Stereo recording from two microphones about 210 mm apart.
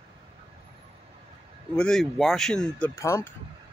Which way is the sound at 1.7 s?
5° left (ahead or behind).